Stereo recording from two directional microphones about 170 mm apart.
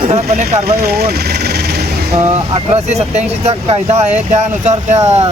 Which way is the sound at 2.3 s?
35° right (ahead or behind).